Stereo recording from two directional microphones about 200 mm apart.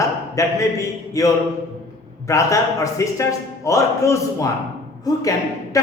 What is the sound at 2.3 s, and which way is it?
A man's voice, 15° left (ahead or behind).